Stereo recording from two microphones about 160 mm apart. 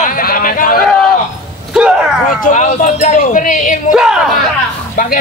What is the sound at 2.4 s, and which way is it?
Speech, 55° left (ahead or behind).